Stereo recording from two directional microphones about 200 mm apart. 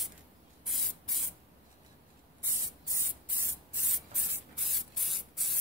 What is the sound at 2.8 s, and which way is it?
Spray, 15° right (ahead or behind).